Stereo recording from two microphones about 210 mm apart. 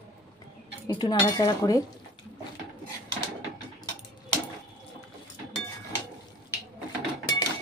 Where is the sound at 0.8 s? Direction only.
20° left (ahead or behind).